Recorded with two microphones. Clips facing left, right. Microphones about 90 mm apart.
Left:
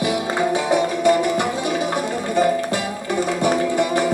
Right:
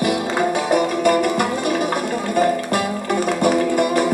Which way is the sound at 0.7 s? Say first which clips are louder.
Even; 55° right (ahead or behind).